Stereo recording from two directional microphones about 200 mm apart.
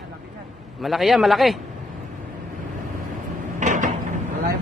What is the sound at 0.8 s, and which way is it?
Speech, centre (ahead or behind).